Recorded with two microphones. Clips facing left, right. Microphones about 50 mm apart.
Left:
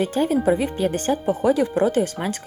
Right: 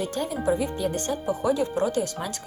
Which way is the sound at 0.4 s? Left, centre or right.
Left.